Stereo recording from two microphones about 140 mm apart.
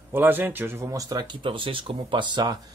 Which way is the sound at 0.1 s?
15° right (ahead or behind).